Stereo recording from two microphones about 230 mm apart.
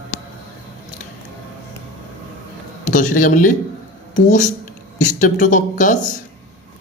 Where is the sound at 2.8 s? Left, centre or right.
Left.